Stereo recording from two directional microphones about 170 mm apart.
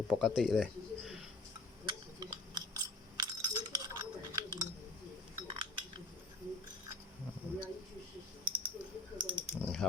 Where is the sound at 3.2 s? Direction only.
25° right (ahead or behind).